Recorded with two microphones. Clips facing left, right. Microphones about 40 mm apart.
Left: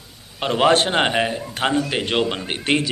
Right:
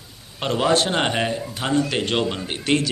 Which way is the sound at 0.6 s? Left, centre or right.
Left.